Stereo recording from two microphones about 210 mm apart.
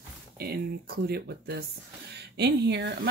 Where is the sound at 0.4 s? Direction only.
50° right (ahead or behind).